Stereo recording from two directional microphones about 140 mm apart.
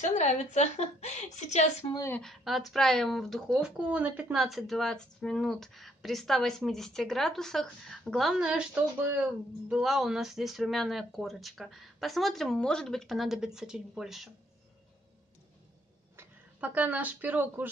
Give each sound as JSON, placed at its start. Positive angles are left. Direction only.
{"t": 0.0, "sound": "a woman's voice", "side_deg": 55}
{"t": 2.2, "sound": "speech", "side_deg": 0}
{"t": 16.2, "sound": "speech", "side_deg": -10}